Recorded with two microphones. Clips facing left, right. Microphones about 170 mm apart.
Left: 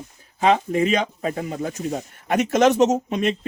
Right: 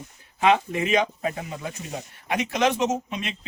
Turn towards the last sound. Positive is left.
turn(degrees=45)  # may be behind; listen again after turning